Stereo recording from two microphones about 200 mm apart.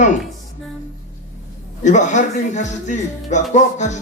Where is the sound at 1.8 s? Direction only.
35° left (ahead or behind).